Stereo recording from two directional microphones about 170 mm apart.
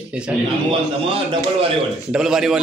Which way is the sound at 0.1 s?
5° right (ahead or behind).